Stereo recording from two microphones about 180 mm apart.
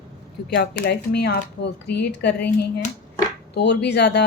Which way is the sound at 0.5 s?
65° left (ahead or behind).